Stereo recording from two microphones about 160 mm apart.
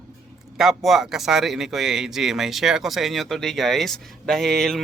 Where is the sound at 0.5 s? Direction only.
Centre (ahead or behind).